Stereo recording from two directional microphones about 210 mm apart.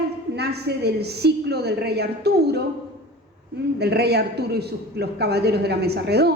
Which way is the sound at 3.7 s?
50° right (ahead or behind).